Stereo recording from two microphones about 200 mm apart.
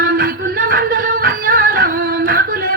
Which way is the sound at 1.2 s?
45° right (ahead or behind).